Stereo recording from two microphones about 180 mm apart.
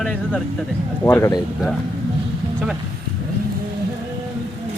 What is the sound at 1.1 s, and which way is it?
Speech, 15° left (ahead or behind).